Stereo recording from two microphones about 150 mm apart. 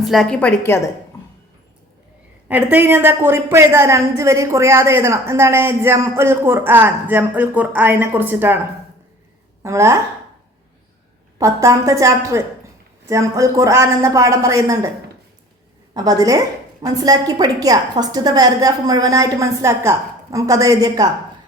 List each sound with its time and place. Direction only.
0.0 s a woman's voice: centre (ahead or behind)
2.5 s a woman's voice: 10° right (ahead or behind)
9.6 s a woman's voice: 20° right (ahead or behind)
11.3 s a woman's voice: 20° right (ahead or behind)
16.0 s a woman's voice: 25° right (ahead or behind)